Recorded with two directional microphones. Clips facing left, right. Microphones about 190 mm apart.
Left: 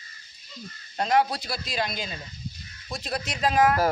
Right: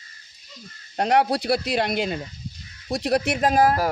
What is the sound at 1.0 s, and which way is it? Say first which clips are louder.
Speech: right 3 dB; 65° right (ahead or behind).